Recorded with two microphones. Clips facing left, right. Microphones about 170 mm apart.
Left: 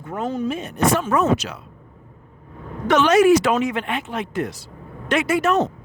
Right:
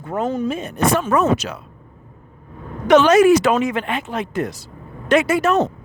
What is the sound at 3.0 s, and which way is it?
Speech, 45° right (ahead or behind).